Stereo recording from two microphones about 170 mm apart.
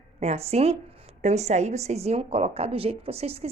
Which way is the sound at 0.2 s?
40° right (ahead or behind).